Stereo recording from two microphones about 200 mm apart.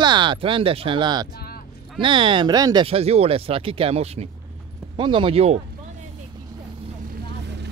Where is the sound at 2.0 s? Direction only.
25° right (ahead or behind).